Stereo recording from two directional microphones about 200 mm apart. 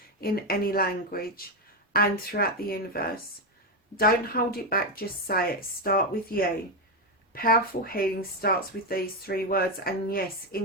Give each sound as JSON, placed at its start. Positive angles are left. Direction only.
{"t": 0.2, "sound": "speech", "side_deg": 50}